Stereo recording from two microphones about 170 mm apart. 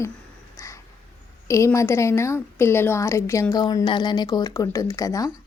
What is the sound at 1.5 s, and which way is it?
A woman's voice, 20° left (ahead or behind).